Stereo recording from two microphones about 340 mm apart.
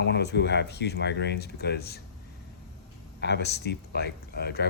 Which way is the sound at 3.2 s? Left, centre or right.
Left.